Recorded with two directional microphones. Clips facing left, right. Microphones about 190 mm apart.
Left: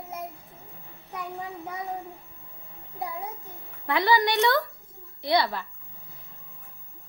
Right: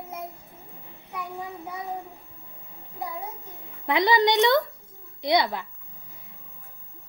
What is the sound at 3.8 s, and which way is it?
Speech, 20° right (ahead or behind).